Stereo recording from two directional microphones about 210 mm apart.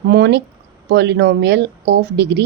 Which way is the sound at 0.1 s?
55° right (ahead or behind).